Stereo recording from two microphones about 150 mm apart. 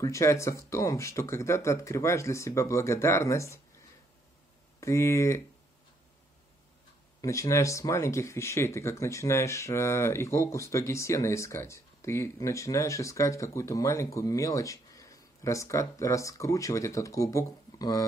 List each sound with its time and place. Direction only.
0.0 s speech: 20° left (ahead or behind)
4.7 s speech: 20° left (ahead or behind)
7.2 s speech: 20° left (ahead or behind)